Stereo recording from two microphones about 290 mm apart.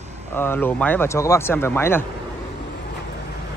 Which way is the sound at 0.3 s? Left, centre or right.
Centre.